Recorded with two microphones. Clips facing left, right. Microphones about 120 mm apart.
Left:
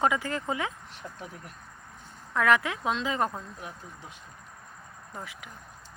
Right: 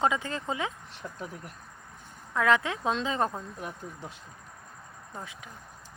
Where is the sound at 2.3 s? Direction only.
20° right (ahead or behind).